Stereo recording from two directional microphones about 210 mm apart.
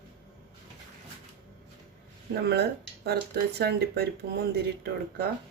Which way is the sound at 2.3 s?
50° right (ahead or behind).